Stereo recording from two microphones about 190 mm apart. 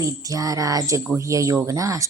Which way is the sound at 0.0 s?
20° right (ahead or behind).